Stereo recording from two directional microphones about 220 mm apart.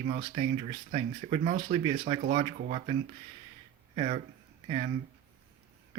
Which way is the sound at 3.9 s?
30° right (ahead or behind).